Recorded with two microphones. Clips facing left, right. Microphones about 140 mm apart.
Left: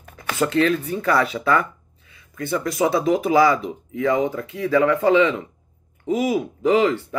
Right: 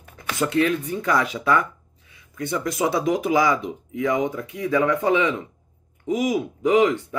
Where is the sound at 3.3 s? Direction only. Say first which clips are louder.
Left 3 dB; 20° right (ahead or behind).